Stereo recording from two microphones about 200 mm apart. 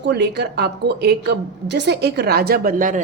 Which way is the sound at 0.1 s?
55° right (ahead or behind).